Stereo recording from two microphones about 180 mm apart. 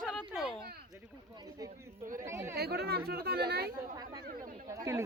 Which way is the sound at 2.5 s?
60° right (ahead or behind).